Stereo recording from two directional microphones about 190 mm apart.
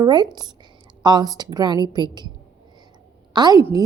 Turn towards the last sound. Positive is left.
turn(degrees=-20)  # may be behind; listen again after turning